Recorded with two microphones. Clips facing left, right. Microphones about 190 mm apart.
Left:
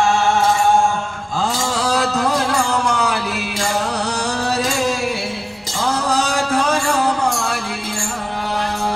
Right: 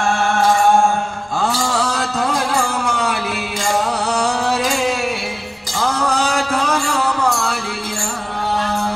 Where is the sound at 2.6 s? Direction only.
55° right (ahead or behind).